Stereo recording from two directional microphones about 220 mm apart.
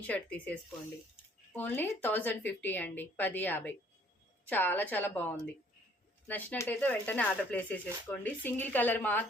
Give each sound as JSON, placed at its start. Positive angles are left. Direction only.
{"t": 0.1, "sound": "speech", "side_deg": 5}
{"t": 6.2, "sound": "speech", "side_deg": 5}